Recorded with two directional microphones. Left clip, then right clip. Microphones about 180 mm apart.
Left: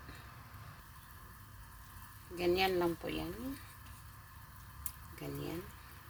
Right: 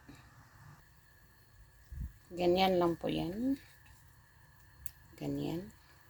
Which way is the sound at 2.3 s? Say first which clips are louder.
Right 3 dB; 40° right (ahead or behind).